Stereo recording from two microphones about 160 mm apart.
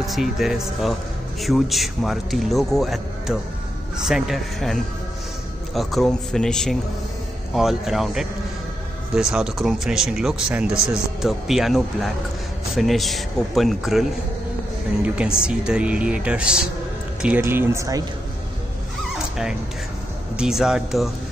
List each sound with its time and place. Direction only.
0.0 s speech: centre (ahead or behind)
15.1 s speech: 5° right (ahead or behind)
17.4 s speech: 15° right (ahead or behind)
20.3 s speech: 5° right (ahead or behind)